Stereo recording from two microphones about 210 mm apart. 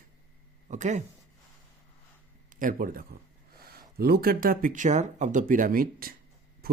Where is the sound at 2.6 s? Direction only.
40° right (ahead or behind).